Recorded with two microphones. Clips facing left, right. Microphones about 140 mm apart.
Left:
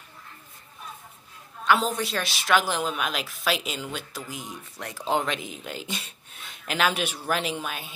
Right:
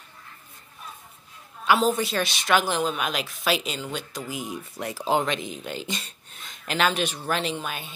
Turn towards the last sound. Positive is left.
turn(degrees=5)  # may be behind; listen again after turning